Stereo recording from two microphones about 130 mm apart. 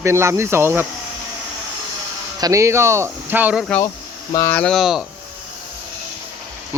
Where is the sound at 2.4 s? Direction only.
25° right (ahead or behind).